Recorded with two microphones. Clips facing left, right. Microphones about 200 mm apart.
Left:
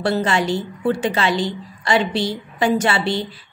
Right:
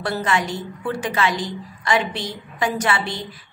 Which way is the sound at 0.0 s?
30° left (ahead or behind).